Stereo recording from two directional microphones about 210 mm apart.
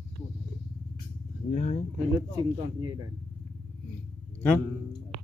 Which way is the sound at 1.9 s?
20° right (ahead or behind).